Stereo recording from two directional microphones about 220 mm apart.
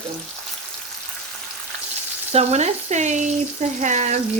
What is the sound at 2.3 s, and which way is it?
Frying, 30° right (ahead or behind).